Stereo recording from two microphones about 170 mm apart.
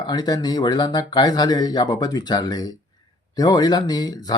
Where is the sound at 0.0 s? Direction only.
25° left (ahead or behind).